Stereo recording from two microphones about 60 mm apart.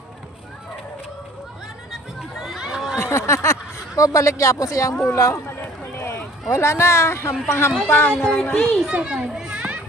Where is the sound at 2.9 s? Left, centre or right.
Left.